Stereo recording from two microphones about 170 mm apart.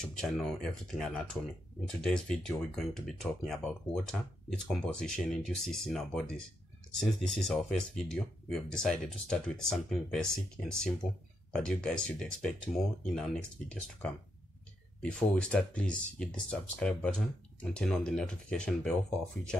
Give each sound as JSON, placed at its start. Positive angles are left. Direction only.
{"t": 0.1, "sound": "speech", "side_deg": 5}